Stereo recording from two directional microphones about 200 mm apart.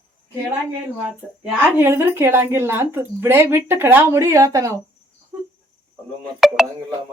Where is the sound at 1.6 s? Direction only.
10° right (ahead or behind).